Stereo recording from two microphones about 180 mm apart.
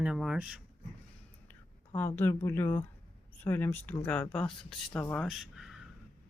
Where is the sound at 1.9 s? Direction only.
10° left (ahead or behind).